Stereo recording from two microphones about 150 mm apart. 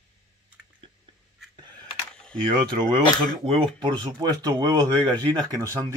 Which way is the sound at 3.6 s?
30° right (ahead or behind).